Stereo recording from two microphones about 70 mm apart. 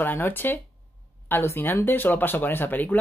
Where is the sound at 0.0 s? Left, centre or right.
Left.